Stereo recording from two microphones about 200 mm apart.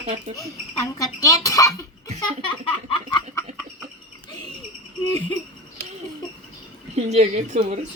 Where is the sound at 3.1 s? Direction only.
20° left (ahead or behind).